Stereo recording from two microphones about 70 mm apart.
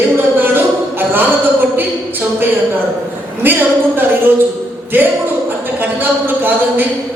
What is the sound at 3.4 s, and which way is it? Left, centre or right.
Speech, right.